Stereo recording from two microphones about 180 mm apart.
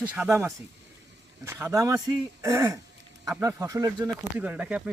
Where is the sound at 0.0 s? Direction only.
10° right (ahead or behind).